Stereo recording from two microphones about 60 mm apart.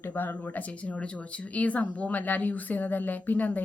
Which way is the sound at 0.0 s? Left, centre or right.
Left.